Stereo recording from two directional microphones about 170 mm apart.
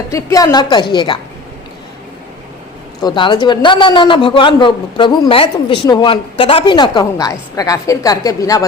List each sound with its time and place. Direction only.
0.1 s a man's voice: 20° left (ahead or behind)
3.0 s a man's voice: 25° left (ahead or behind)